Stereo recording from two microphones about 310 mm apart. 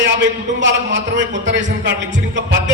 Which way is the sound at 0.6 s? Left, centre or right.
Right.